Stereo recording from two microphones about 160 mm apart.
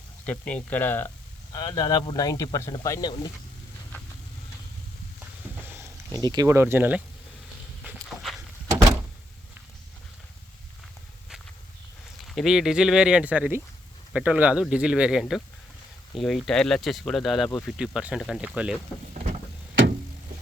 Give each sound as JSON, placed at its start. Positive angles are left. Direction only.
{"t": 0.3, "sound": "speech", "side_deg": 10}
{"t": 1.5, "sound": "speech", "side_deg": 25}
{"t": 5.6, "sound": "a sound", "side_deg": -15}
{"t": 6.2, "sound": "speech", "side_deg": -25}
{"t": 12.3, "sound": "speech", "side_deg": 0}
{"t": 19.1, "sound": "a sound", "side_deg": -45}